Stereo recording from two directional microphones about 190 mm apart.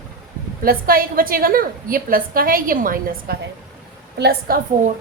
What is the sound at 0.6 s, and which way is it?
A woman's voice, 50° right (ahead or behind).